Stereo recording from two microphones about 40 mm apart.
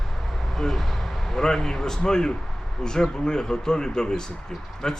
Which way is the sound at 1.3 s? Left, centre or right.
Centre.